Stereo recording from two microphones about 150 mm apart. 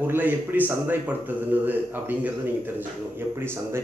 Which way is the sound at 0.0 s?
15° right (ahead or behind).